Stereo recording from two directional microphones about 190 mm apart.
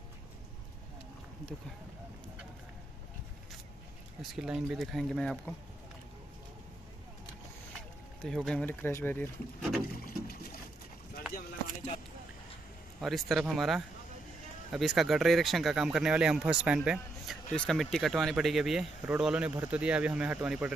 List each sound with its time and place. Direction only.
4.2 s speech: centre (ahead or behind)
8.2 s speech: centre (ahead or behind)
10.0 s boat: 50° left (ahead or behind)
11.3 s speech: 40° left (ahead or behind)
13.0 s speech: centre (ahead or behind)